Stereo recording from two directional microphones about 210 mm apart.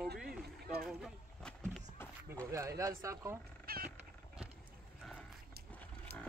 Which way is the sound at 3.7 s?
45° right (ahead or behind).